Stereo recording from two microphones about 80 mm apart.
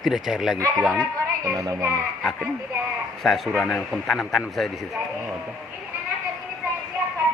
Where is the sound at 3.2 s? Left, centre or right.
Centre.